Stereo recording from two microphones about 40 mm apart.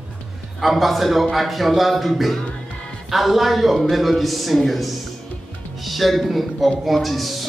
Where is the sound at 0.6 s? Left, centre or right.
Centre.